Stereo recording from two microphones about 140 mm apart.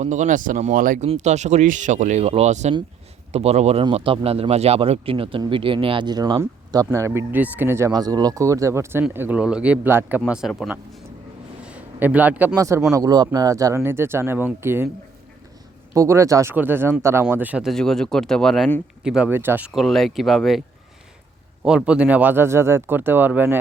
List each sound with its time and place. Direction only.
0.0 s speech: 60° right (ahead or behind)
1.0 s speech: 55° right (ahead or behind); by 7.9 s 20° right (ahead or behind)
7.9 s speech: 30° right (ahead or behind); by 10.5 s 5° right (ahead or behind)
11.6 s a sound: 10° right (ahead or behind)
12.5 s speech: 20° right (ahead or behind)
16.0 s speech: 20° right (ahead or behind)
17.7 s speech: 5° left (ahead or behind); by 19.7 s 15° right (ahead or behind)
19.7 s speech: centre (ahead or behind)
21.6 s speech: 5° right (ahead or behind)